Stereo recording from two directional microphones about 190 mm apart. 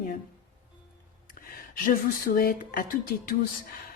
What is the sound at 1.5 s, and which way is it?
Speech, 50° left (ahead or behind).